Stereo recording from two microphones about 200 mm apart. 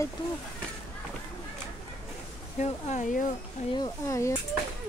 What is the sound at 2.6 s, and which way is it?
Speech, 35° left (ahead or behind).